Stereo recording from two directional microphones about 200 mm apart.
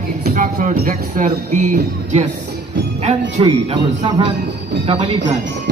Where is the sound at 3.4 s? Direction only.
25° right (ahead or behind).